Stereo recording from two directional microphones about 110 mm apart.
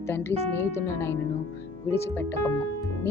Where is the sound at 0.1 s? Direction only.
20° left (ahead or behind).